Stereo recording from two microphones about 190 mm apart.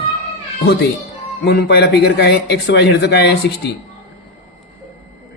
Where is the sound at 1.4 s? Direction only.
60° left (ahead or behind).